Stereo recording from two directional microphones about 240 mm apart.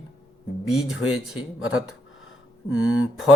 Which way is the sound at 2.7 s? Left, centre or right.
Left.